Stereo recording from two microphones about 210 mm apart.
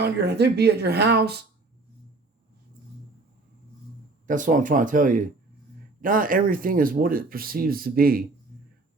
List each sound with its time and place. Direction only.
0.0 s speech: 50° right (ahead or behind)
4.3 s speech: 40° right (ahead or behind)